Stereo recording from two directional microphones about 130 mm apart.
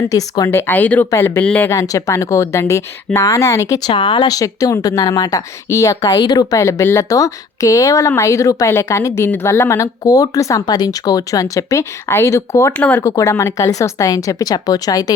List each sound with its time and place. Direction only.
0.1 s speech: 25° left (ahead or behind)
1.7 s speech: 25° left (ahead or behind)
3.9 s speech: 40° left (ahead or behind)